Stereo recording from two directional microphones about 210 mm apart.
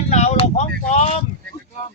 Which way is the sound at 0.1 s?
30° left (ahead or behind).